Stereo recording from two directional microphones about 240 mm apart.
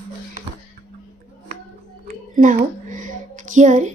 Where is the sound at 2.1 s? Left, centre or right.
Right.